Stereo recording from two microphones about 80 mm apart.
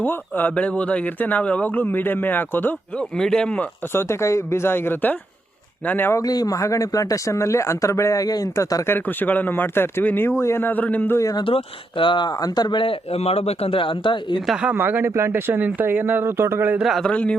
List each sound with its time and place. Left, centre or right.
0.0 s speech: left
3.2 s speech: centre
3.9 s speech: left; by 6.1 s centre
6.2 s speech: left
8.9 s speech: left
10.2 s speech: left
11.9 s speech: left
12.4 s speech: left
13.7 s speech: left
14.4 s speech: centre
14.7 s speech: right
16.8 s speech: centre
17.1 s speech: centre